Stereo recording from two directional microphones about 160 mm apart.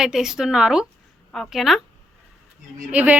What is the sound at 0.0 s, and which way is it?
A woman's voice, 5° right (ahead or behind).